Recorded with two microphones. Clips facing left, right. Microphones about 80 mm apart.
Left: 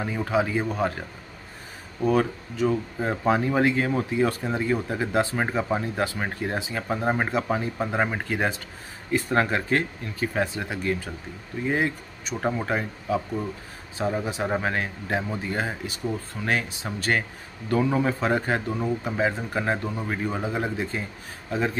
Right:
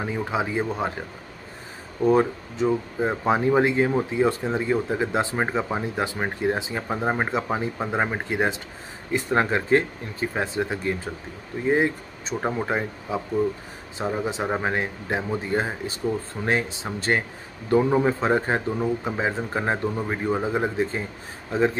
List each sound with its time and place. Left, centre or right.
0.0 s speech: centre
2.0 s speech: right
3.0 s a man's voice: centre